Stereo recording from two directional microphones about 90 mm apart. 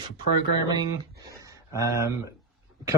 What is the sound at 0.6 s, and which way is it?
Speech, 45° right (ahead or behind).